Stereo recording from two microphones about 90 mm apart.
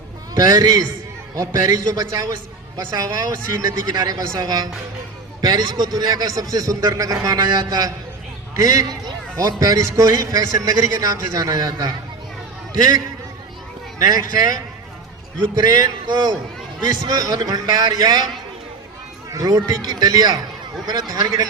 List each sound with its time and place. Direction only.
0.3 s a man's voice: 45° right (ahead or behind)
14.0 s a man's voice: 45° right (ahead or behind)
19.3 s a man's voice: 45° right (ahead or behind)